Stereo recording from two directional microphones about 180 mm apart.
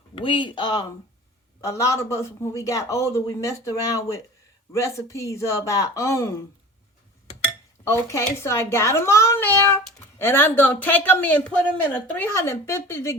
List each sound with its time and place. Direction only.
0.2 s a child's voice: 30° left (ahead or behind)
7.9 s a child's voice: 15° left (ahead or behind)